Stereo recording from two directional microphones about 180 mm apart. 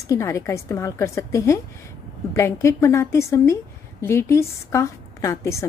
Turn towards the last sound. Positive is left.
turn(degrees=15)  # may be behind; listen again after turning